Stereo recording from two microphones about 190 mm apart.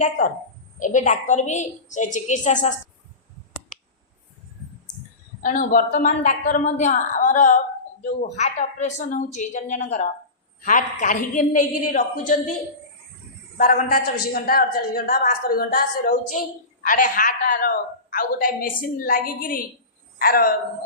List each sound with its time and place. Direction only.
0.2 s a woman's voice: 40° left (ahead or behind)
5.4 s a woman's voice: 45° left (ahead or behind)
13.6 s a woman's voice: 50° left (ahead or behind)